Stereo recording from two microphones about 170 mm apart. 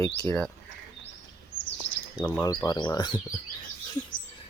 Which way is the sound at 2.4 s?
25° left (ahead or behind).